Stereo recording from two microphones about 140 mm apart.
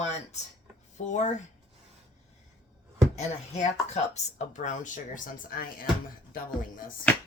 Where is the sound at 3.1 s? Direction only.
55° left (ahead or behind); by 5.8 s 90° left.